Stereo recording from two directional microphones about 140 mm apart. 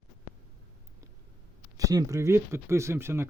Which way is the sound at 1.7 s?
25° right (ahead or behind).